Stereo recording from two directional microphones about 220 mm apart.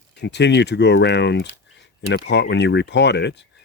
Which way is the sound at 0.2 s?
50° left (ahead or behind).